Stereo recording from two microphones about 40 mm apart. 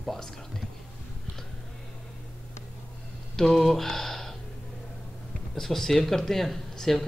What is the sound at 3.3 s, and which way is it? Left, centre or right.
Speech, centre.